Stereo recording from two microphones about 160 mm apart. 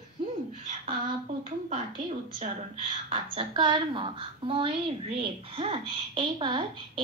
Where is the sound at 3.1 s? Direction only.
30° right (ahead or behind).